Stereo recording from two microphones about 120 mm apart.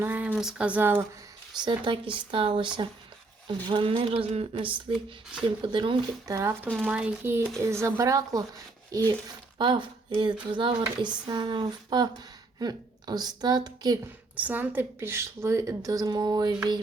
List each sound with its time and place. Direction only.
0.0 s speech: 10° right (ahead or behind)
1.5 s speech: 40° right (ahead or behind)
6.2 s a woman's voice: 25° right (ahead or behind)
6.8 s a woman's voice: 10° right (ahead or behind); by 9.1 s 30° right (ahead or behind)
9.6 s speech: 40° right (ahead or behind)
14.3 s a woman's voice: 15° right (ahead or behind); by 16.6 s 35° right (ahead or behind)